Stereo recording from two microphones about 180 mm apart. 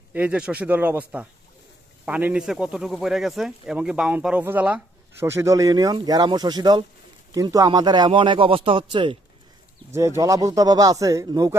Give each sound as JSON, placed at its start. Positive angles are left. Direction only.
{"t": 0.1, "sound": "speech", "side_deg": -5}
{"t": 9.9, "sound": "speech", "side_deg": -15}